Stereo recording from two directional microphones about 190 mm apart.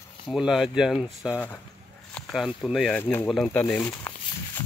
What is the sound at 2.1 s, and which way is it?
Speech, centre (ahead or behind).